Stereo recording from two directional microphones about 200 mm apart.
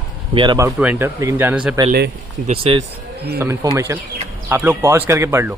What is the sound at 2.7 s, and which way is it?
Speech, 30° right (ahead or behind).